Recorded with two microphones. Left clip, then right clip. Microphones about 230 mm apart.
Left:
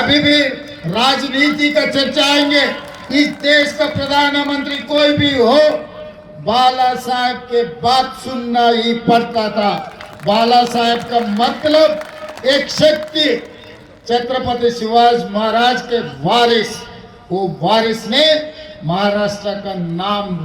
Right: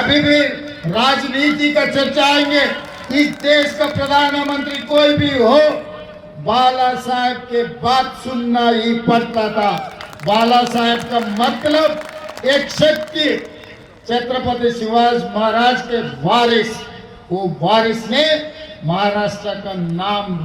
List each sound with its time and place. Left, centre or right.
0.1 s a man's voice: left